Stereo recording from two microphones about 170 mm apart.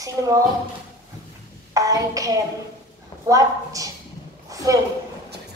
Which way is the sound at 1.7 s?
20° right (ahead or behind).